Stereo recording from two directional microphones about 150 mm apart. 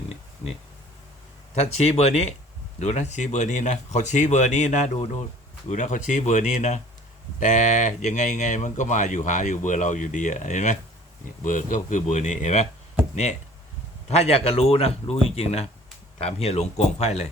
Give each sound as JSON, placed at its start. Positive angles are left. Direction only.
{"t": 1.5, "sound": "speech", "side_deg": 45}
{"t": 14.1, "sound": "a man's voice", "side_deg": 45}